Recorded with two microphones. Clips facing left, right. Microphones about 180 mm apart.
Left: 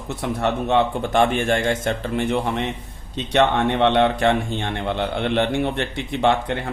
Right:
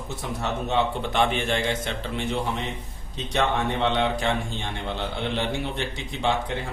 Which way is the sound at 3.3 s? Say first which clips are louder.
Left 6 dB; 65° left (ahead or behind).